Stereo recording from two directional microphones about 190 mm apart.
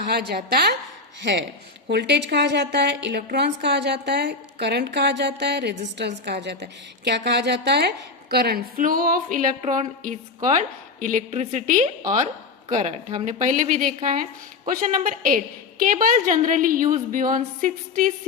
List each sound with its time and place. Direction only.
0.0 s a woman's voice: 55° right (ahead or behind)